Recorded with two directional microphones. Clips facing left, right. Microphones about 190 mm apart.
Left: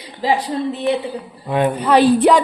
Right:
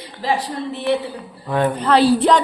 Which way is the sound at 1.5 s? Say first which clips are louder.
Left 1 dB; 15° left (ahead or behind).